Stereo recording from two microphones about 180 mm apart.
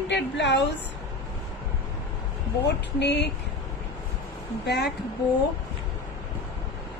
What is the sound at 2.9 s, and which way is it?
Speech, 70° left (ahead or behind).